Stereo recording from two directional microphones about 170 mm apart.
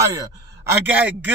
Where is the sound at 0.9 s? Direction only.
10° right (ahead or behind).